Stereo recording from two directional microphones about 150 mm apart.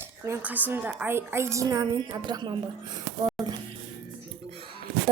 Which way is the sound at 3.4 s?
Centre (ahead or behind).